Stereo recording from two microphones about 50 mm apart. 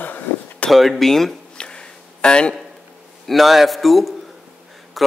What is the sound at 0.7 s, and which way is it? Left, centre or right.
Speech, centre.